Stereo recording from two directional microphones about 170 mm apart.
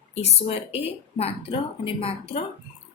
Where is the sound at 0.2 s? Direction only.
35° left (ahead or behind).